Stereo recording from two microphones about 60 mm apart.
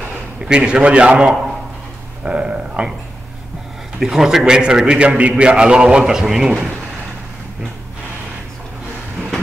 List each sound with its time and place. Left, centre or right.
0.5 s a man's voice: centre
4.0 s a man's voice: centre